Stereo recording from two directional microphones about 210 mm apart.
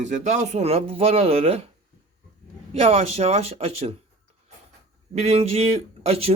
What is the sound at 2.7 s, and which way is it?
A man's voice, 30° right (ahead or behind).